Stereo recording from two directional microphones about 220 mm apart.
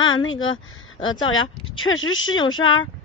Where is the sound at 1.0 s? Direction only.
20° left (ahead or behind).